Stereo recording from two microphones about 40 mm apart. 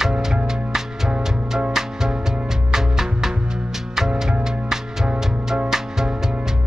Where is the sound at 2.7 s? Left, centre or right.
Centre.